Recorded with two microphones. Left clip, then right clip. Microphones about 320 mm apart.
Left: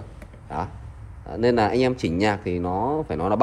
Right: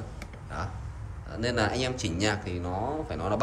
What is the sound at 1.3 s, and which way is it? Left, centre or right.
A man's voice, centre.